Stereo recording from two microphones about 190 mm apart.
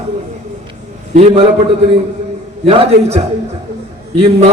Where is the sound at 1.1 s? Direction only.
30° right (ahead or behind).